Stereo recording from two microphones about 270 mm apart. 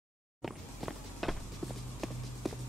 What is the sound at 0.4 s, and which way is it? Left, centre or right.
Walk, centre.